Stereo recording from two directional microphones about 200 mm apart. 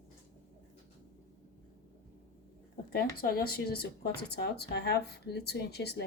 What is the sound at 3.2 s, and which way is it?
Speech, 50° left (ahead or behind).